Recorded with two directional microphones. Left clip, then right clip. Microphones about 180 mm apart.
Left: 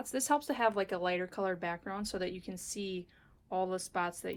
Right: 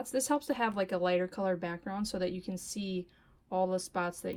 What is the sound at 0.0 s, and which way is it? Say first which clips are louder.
Speech: even; 40° right (ahead or behind).